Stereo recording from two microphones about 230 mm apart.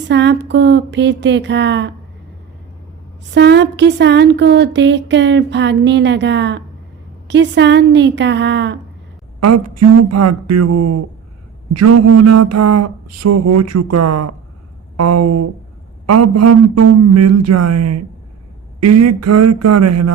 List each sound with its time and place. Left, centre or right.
0.1 s speech: right
3.3 s speech: right
9.4 s a sound: right